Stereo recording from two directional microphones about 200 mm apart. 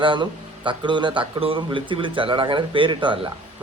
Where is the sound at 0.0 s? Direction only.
25° right (ahead or behind).